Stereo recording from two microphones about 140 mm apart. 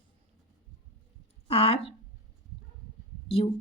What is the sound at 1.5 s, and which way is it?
Speech, 45° left (ahead or behind).